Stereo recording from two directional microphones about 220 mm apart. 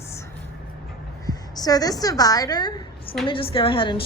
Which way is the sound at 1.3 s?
15° left (ahead or behind).